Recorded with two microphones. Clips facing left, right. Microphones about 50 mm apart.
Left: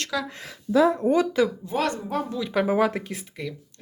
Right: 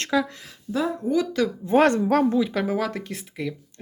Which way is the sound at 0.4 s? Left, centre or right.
Left.